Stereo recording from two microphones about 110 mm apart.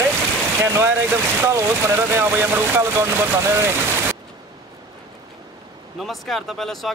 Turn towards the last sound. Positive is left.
turn(degrees=0)  # may be behind; listen again after turning